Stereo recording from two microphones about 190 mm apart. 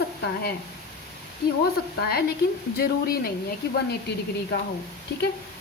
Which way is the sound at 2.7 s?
55° left (ahead or behind).